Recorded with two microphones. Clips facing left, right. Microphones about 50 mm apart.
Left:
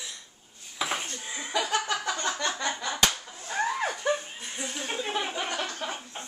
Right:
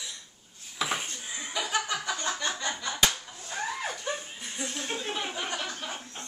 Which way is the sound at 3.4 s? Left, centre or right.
Left.